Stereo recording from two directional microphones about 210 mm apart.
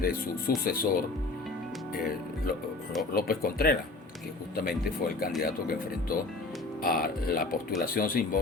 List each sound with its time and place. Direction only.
0.0 s speech: 45° left (ahead or behind)